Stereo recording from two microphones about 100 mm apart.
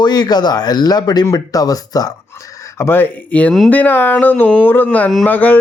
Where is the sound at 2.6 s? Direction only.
25° left (ahead or behind).